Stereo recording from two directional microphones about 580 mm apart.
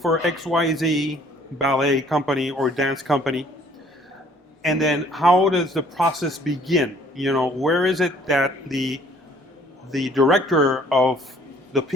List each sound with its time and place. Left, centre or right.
0.0 s speech: centre
4.6 s speech: centre